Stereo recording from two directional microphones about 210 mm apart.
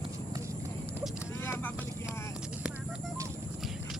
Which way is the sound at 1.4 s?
10° left (ahead or behind).